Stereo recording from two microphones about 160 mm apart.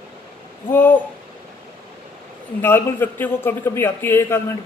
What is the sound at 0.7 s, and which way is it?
Speech, 10° left (ahead or behind).